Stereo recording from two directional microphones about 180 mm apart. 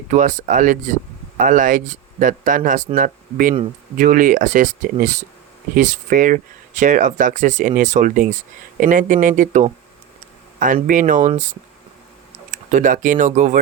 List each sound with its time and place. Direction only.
0.1 s speech: 45° right (ahead or behind)
12.5 s speech: 45° right (ahead or behind)